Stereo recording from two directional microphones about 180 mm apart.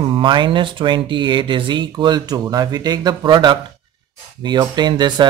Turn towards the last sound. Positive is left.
turn(degrees=-25)  # may be behind; listen again after turning